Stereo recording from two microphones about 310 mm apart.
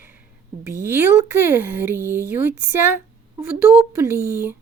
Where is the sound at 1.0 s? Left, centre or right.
Centre.